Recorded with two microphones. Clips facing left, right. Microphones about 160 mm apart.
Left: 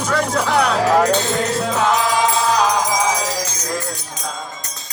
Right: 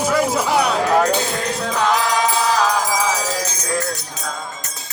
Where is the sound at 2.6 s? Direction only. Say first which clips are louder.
Left 1 dB; 20° left (ahead or behind).